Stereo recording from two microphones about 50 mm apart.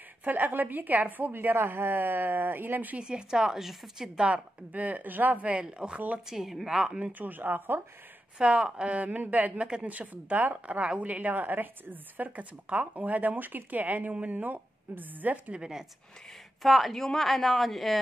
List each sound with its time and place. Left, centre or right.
0.2 s speech: right
3.0 s a woman's voice: centre
4.2 s speech: right
6.3 s a woman's voice: centre
7.0 s speech: right
8.4 s speech: centre; by 15.5 s right
15.5 s a woman's voice: centre
16.6 s a woman's voice: centre